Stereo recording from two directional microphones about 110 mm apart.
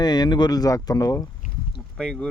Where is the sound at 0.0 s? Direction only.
40° left (ahead or behind).